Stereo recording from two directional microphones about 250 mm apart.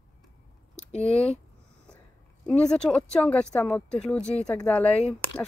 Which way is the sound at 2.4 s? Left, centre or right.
Centre.